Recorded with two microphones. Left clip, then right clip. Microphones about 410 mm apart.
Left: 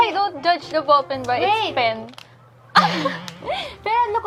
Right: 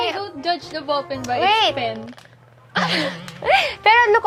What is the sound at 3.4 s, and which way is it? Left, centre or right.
Speech, right.